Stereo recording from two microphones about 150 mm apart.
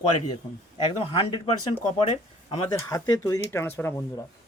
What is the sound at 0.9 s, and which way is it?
Speech, 35° left (ahead or behind).